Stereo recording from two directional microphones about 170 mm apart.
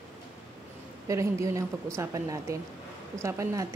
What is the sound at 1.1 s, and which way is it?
A woman's voice, 20° right (ahead or behind).